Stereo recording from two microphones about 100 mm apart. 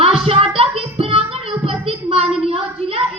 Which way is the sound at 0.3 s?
70° right (ahead or behind).